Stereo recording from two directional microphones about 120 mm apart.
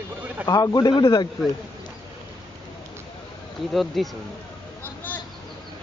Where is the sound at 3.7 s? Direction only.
Centre (ahead or behind).